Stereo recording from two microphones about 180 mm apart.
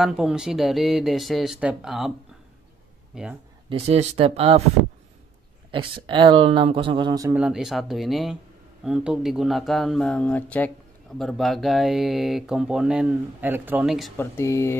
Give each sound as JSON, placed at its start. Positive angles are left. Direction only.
{"t": 0.0, "sound": "speech", "side_deg": 0}
{"t": 3.6, "sound": "speech", "side_deg": -35}
{"t": 5.7, "sound": "speech", "side_deg": -30}
{"t": 7.3, "sound": "speech", "side_deg": -5}
{"t": 14.1, "sound": "speech", "side_deg": 15}